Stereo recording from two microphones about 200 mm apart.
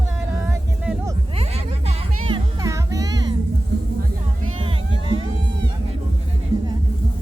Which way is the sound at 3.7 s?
55° right (ahead or behind).